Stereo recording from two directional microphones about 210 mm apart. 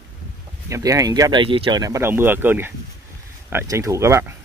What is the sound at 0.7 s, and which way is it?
Speech, 15° right (ahead or behind).